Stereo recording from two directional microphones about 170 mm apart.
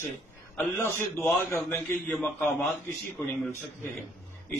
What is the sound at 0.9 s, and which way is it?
Speech, 15° left (ahead or behind).